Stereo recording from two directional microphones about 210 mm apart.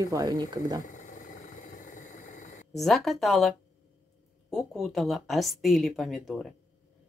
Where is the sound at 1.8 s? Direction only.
35° left (ahead or behind).